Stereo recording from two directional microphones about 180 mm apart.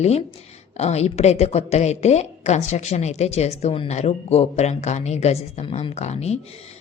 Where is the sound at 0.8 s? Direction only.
35° left (ahead or behind).